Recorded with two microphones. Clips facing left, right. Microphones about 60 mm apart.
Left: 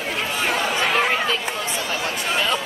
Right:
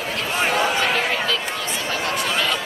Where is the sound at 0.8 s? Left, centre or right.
Left.